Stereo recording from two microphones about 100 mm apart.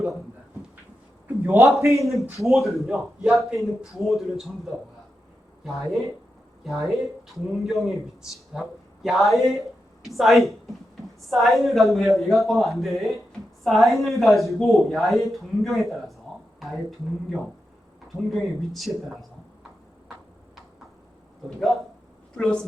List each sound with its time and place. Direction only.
1.4 s a man's voice: 25° right (ahead or behind)
2.0 s speech: centre (ahead or behind)
18.3 s speech: centre (ahead or behind)